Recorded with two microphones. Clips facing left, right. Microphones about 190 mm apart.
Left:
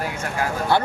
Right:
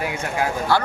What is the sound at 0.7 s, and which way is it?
Speech, 20° left (ahead or behind).